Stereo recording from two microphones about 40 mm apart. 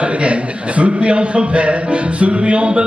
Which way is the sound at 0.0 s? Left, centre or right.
Right.